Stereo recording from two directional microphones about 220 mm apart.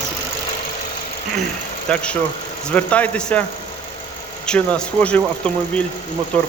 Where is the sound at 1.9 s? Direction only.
5° left (ahead or behind).